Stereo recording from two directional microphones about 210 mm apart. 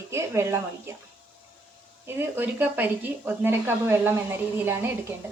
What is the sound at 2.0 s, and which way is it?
Speech, 10° right (ahead or behind).